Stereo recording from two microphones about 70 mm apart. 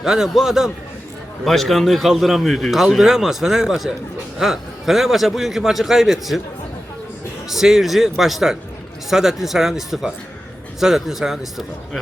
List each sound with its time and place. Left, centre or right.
0.0 s a man's voice: centre
7.5 s a man's voice: centre